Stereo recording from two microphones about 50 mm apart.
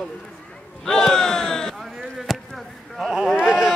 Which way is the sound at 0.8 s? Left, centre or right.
Centre.